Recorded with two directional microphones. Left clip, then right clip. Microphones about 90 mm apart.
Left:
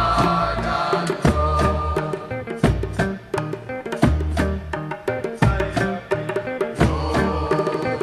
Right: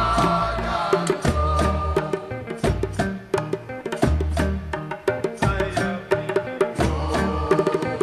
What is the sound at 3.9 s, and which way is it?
Music, 20° left (ahead or behind).